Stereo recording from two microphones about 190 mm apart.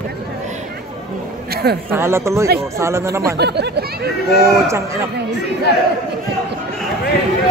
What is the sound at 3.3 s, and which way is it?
Speech, 60° right (ahead or behind).